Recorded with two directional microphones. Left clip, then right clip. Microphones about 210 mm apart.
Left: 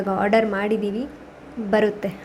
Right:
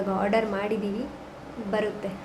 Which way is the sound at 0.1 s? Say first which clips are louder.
Left 7 dB; 20° left (ahead or behind).